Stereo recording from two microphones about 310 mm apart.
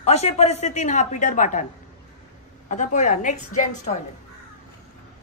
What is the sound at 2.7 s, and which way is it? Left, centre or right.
A woman's voice, left.